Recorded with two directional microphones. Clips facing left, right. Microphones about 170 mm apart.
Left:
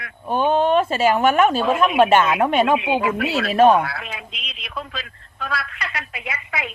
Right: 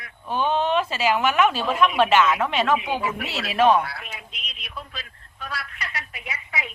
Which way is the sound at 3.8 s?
90° left.